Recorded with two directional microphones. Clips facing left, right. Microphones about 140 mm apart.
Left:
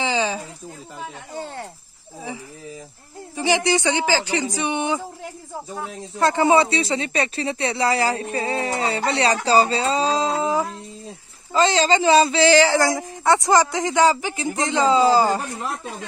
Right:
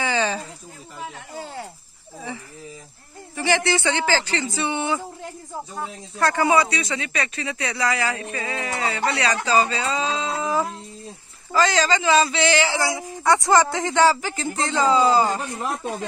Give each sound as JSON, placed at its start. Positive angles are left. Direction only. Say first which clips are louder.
{"t": 0.0, "sound": "a sound", "louder": "left 1 dB", "side_deg": 15}
{"t": 3.3, "sound": "speech", "louder": "left 2 dB", "side_deg": 15}
{"t": 6.1, "sound": "speech", "louder": "left 2 dB", "side_deg": 20}
{"t": 11.5, "sound": "speech", "louder": "left 2 dB", "side_deg": 25}
{"t": 13.2, "sound": "a man's voice", "louder": "even", "side_deg": 25}